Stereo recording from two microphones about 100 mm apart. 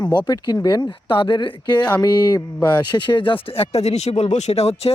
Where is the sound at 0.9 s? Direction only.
60° left (ahead or behind).